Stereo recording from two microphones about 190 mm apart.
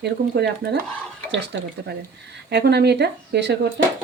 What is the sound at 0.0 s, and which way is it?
A woman's voice, 60° right (ahead or behind).